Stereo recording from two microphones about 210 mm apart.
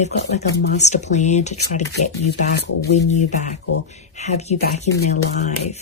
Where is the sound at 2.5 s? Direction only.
55° left (ahead or behind).